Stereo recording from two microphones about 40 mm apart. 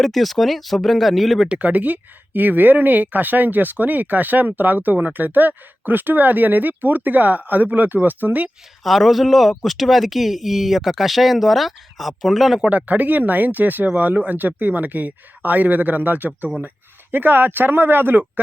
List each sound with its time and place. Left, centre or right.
0.0 s speech: centre
1.5 s speech: right
8.8 s speech: centre
12.6 s speech: right